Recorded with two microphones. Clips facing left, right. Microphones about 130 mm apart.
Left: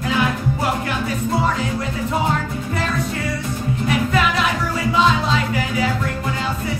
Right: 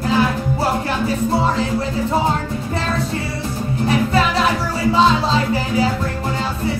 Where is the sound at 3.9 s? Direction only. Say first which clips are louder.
Right 2 dB; 35° right (ahead or behind).